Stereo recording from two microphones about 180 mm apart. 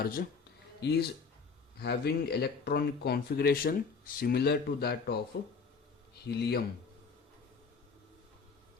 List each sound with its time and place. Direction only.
0.0 s speech: 55° left (ahead or behind)
0.8 s speech: 65° left (ahead or behind)
6.2 s speech: 65° left (ahead or behind)